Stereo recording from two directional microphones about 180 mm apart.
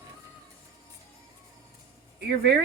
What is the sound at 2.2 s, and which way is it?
Speech, 65° right (ahead or behind).